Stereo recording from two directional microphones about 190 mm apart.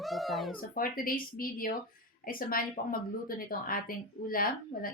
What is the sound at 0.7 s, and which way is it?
Speech, 50° left (ahead or behind).